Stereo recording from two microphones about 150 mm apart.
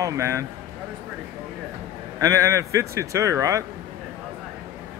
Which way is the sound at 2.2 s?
20° right (ahead or behind).